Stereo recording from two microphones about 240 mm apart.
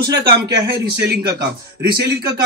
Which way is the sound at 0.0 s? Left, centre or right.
Right.